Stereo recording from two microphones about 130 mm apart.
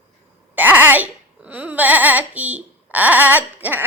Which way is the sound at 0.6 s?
15° right (ahead or behind).